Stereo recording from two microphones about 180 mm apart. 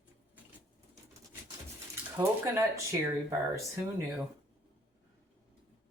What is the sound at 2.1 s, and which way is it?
Speech, 15° right (ahead or behind).